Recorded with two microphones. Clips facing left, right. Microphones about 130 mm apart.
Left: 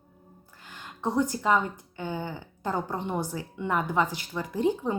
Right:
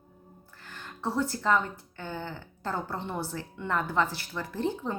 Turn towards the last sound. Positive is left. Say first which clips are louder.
# left 5 dB
turn(degrees=15)  # may be behind; listen again after turning